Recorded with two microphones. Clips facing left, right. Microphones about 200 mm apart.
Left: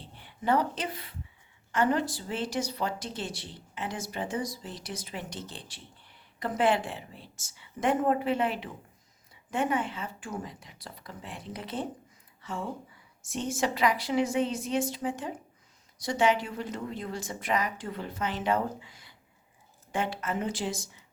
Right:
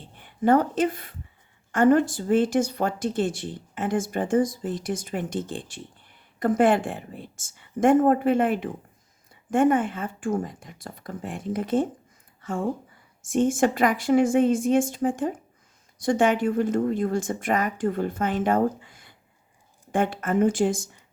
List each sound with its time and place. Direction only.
0.0 s a woman's voice: 50° right (ahead or behind)